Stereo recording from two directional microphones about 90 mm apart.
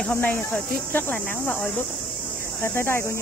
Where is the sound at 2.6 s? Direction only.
25° left (ahead or behind).